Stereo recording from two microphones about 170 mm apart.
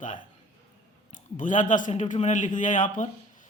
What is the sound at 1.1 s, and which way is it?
A man's voice, 50° left (ahead or behind).